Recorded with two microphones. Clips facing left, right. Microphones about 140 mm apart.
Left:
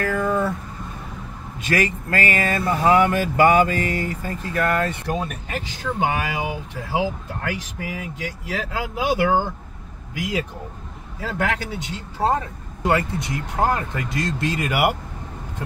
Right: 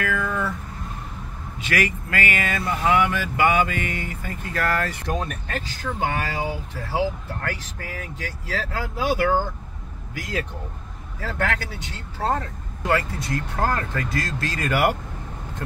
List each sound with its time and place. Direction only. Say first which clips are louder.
0.0 s vehicle: left 4 dB; 40° left (ahead or behind)
1.6 s speech: left 3 dB; 35° left (ahead or behind)
4.6 s speech: left 3 dB; 20° left (ahead or behind)
5.0 s speech: left 1 dB; 5° left (ahead or behind)
5.9 s speech: left 2 dB; 15° left (ahead or behind)